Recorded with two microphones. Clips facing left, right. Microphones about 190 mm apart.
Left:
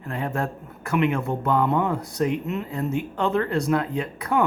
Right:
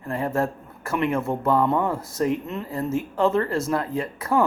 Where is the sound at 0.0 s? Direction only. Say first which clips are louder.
Right 3 dB; centre (ahead or behind).